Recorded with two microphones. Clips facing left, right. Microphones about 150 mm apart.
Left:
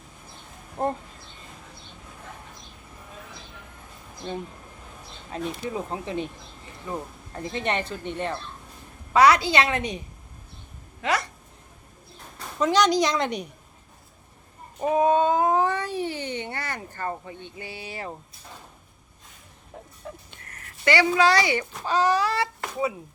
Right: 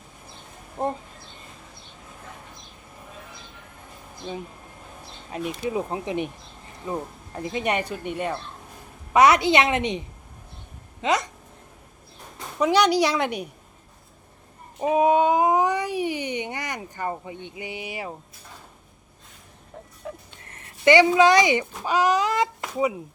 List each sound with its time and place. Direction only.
0.8 s speech: centre (ahead or behind)
5.3 s speech: 15° right (ahead or behind)
9.1 s a woman's voice: 20° right (ahead or behind)
11.0 s a woman's voice: 20° right (ahead or behind)
12.5 s speech: 10° right (ahead or behind)
14.8 s speech: 10° right (ahead or behind)
20.0 s a sound: 5° right (ahead or behind)
20.4 s a child's voice: 25° right (ahead or behind)